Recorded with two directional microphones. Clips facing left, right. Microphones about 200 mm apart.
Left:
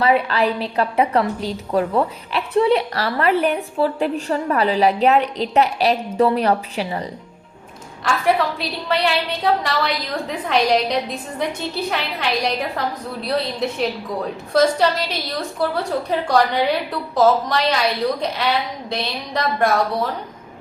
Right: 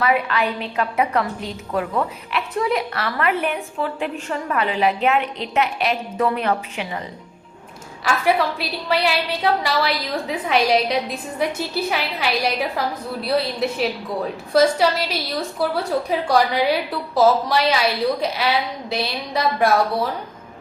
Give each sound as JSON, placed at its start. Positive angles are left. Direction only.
{"t": 0.0, "sound": "a woman's voice", "side_deg": 30}
{"t": 8.0, "sound": "a woman's voice", "side_deg": -5}